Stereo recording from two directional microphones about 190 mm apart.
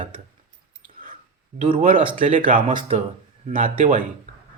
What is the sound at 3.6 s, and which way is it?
Speech, 40° right (ahead or behind).